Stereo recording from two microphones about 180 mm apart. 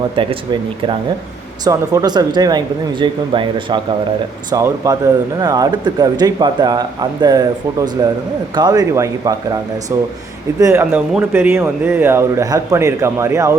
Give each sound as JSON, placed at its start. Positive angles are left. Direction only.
{"t": 0.2, "sound": "speech", "side_deg": -30}
{"t": 10.6, "sound": "speech", "side_deg": -15}